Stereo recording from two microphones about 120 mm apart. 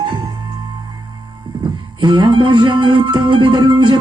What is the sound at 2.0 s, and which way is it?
Music, 40° right (ahead or behind).